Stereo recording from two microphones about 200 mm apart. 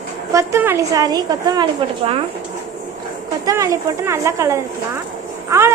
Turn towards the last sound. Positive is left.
turn(degrees=-15)  # may be behind; listen again after turning